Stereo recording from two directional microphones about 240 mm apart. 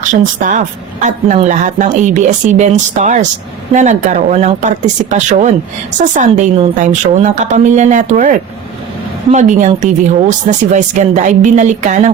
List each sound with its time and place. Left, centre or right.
0.1 s a woman's voice: right